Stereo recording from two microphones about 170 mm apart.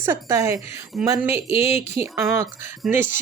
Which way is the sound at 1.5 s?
35° left (ahead or behind).